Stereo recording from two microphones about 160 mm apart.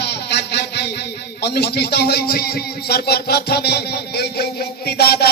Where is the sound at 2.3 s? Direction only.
70° left (ahead or behind); by 4.4 s 85° left.